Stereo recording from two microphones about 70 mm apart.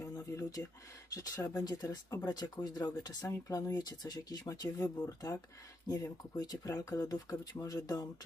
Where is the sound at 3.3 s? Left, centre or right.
Left.